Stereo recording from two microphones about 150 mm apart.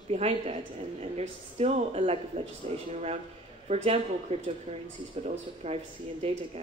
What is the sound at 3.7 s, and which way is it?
A woman's voice, 40° right (ahead or behind).